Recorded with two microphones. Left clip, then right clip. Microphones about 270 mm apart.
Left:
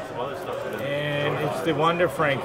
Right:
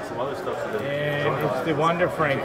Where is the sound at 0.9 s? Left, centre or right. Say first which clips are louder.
Even; centre.